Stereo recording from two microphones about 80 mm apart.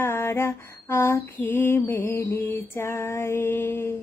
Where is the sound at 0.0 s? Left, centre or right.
Left.